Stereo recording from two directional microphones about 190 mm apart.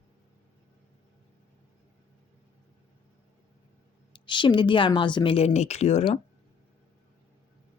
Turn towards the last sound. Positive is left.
turn(degrees=35)  # may be behind; listen again after turning